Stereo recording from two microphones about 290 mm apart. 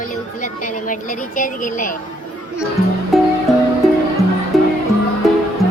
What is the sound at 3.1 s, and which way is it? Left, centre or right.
Music, centre.